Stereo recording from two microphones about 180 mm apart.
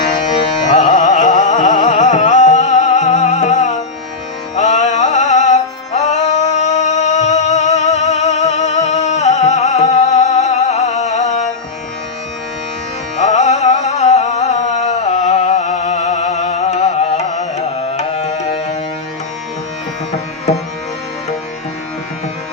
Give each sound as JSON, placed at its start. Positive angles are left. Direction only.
{"t": 0.3, "sound": "music", "side_deg": 45}
{"t": 13.1, "sound": "music", "side_deg": 40}